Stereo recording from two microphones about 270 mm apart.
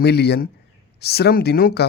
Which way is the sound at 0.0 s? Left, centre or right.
Left.